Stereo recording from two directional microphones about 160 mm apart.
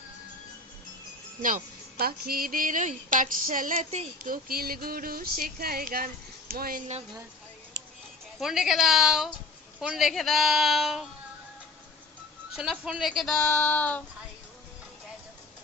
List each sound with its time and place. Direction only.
1.4 s speech: 55° right (ahead or behind)
8.4 s a woman's voice: 5° right (ahead or behind)
12.5 s a woman's voice: 5° right (ahead or behind)